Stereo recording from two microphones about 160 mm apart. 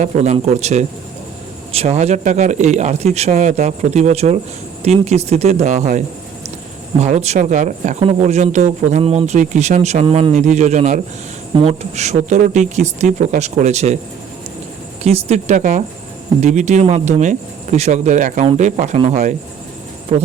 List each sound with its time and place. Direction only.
0.0 s speech: 45° right (ahead or behind)
7.0 s speech: 45° right (ahead or behind)
15.0 s speech: 40° right (ahead or behind)